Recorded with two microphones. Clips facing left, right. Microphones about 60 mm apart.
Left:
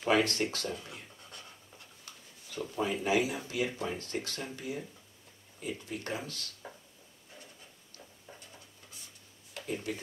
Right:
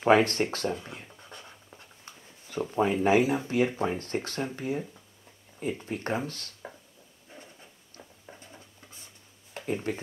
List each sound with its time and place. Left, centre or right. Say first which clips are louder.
0.0 s speech: right 6 dB; right
1.0 s writing: right 4 dB; right
4.6 s speech: right 7 dB; right
7.3 s a sound: right 4 dB; right
8.0 s writing: right 3 dB; right
9.9 s speech: right 5 dB; right